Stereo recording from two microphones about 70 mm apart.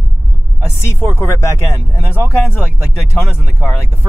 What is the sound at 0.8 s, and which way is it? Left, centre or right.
Speech, left.